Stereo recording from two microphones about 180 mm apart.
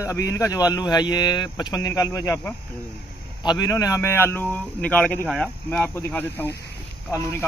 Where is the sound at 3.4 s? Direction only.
25° left (ahead or behind).